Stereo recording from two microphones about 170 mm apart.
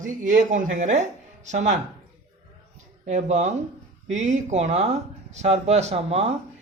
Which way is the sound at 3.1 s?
45° right (ahead or behind).